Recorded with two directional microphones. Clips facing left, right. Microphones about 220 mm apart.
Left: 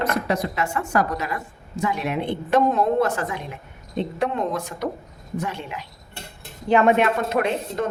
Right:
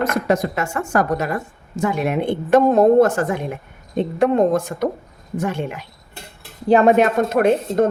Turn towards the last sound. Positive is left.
turn(degrees=-45)  # may be behind; listen again after turning